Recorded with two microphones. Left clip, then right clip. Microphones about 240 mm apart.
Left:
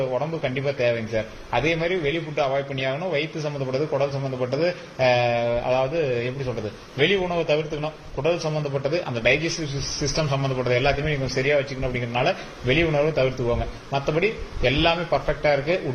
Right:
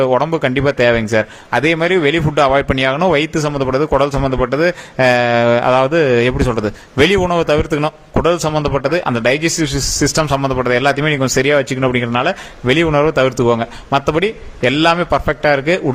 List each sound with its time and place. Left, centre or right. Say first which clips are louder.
0.1 s a man's voice: right 11 dB; right